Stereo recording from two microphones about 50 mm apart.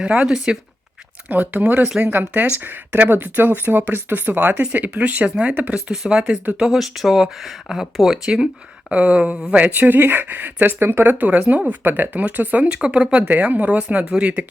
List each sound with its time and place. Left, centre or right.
0.1 s speech: right
1.3 s speech: right
4.7 s speech: right
5.7 s speech: centre
6.7 s speech: centre
8.9 s speech: right
9.7 s speech: right
10.8 s speech: right
11.1 s speech: right
11.7 s speech: right
12.6 s speech: right